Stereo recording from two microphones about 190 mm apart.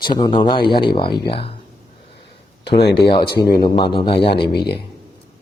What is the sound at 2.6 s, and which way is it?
Speech, 60° left (ahead or behind).